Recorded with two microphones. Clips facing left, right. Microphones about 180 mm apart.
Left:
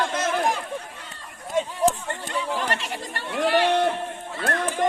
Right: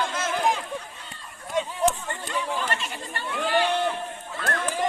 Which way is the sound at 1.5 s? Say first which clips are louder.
Left 2 dB; 45° left (ahead or behind).